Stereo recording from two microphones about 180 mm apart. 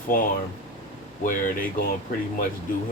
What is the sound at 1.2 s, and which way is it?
Speech, 50° left (ahead or behind).